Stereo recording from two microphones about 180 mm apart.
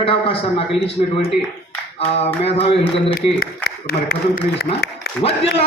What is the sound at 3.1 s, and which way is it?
A man's voice, 55° left (ahead or behind).